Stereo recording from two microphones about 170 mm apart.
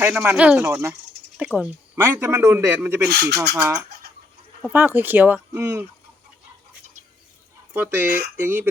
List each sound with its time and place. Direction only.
0.0 s speech: 10° right (ahead or behind)
3.1 s speech: 75° right (ahead or behind)
3.5 s speech: 20° right (ahead or behind)
7.7 s speech: 15° right (ahead or behind)